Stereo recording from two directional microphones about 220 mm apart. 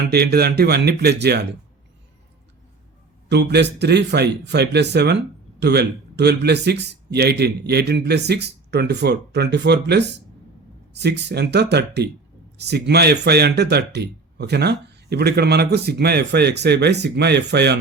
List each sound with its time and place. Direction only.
0.0 s speech: 45° right (ahead or behind)
3.2 s speech: 50° right (ahead or behind)